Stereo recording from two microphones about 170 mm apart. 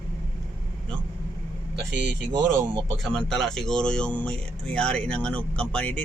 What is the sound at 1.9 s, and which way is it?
Speech, 90° right.